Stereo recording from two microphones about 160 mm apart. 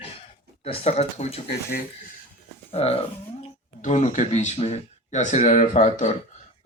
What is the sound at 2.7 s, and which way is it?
Speech, 40° left (ahead or behind).